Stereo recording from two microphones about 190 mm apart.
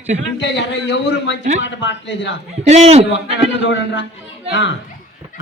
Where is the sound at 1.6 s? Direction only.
75° left (ahead or behind).